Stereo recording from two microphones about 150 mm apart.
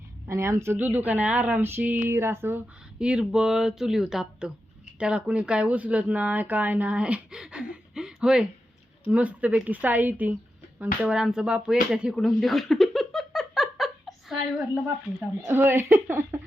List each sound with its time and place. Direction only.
0.3 s speech: 20° right (ahead or behind); by 14.4 s centre (ahead or behind)
15.4 s speech: 15° right (ahead or behind)